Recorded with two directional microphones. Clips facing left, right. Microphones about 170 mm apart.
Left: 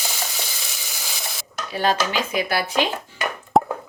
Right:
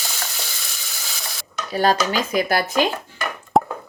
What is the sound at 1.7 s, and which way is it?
Speech, 40° right (ahead or behind).